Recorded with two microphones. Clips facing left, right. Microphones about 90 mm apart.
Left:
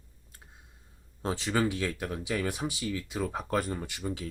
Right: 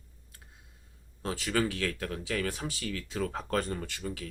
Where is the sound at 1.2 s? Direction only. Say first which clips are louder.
Left 2 dB; 25° left (ahead or behind).